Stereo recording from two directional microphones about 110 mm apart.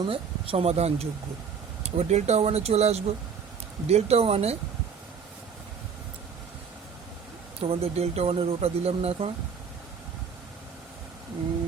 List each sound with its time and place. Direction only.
0.0 s speech: 55° right (ahead or behind)
1.8 s speech: 90° right; by 4.5 s 70° right (ahead or behind)
7.6 s speech: 60° right (ahead or behind)